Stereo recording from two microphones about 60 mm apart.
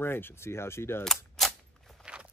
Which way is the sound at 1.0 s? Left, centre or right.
Centre.